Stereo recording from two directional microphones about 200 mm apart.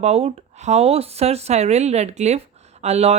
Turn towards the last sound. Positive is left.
turn(degrees=-30)  # may be behind; listen again after turning